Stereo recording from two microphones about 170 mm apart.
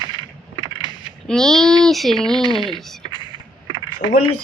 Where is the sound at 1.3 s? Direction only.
5° left (ahead or behind).